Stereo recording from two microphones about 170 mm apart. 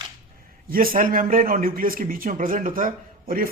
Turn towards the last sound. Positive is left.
turn(degrees=-55)  # may be behind; listen again after turning